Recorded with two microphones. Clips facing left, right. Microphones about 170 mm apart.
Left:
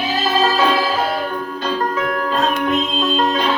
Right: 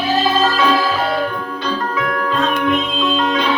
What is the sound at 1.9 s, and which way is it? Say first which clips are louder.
Music: even; 40° left (ahead or behind).